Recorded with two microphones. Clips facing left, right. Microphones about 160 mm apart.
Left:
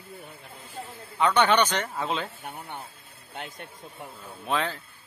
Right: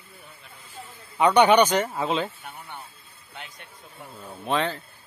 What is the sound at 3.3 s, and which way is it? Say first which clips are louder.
Speech: left 5 dB; 50° left (ahead or behind).